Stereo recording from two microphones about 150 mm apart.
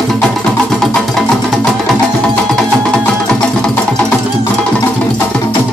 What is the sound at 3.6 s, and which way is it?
Music, 5° left (ahead or behind).